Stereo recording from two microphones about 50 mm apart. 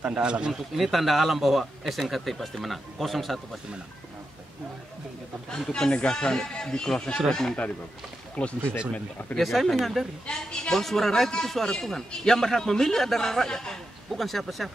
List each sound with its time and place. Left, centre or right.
0.0 s a man's voice: centre
0.5 s speech: centre
5.7 s speech: centre
8.4 s speech: left
9.4 s speech: centre
10.2 s speech: centre